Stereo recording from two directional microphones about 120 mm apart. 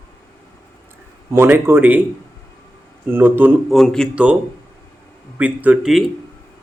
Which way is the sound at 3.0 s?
15° right (ahead or behind).